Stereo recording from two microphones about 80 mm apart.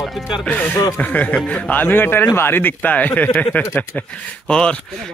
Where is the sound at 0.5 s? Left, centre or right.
Centre.